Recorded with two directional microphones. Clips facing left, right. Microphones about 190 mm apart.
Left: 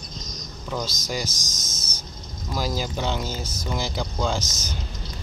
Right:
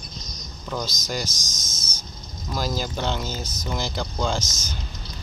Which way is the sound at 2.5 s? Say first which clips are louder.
Even; 10° left (ahead or behind).